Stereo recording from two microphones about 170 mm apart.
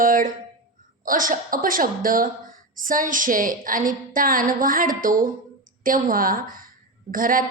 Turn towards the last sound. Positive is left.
turn(degrees=-55)  # may be behind; listen again after turning